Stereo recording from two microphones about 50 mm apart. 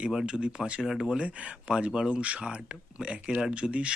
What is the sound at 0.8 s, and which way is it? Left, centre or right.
Speech, centre.